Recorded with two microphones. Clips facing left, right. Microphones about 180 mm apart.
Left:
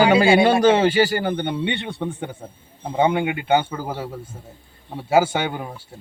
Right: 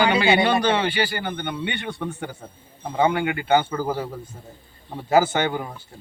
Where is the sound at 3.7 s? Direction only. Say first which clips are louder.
Right 3 dB; 5° left (ahead or behind).